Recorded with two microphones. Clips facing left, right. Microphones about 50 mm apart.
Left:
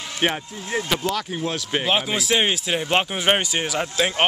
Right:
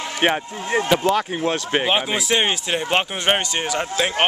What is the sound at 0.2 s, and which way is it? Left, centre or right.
Speech, centre.